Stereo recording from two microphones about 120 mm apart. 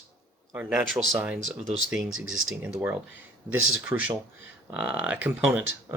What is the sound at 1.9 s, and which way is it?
Speech, 5° right (ahead or behind).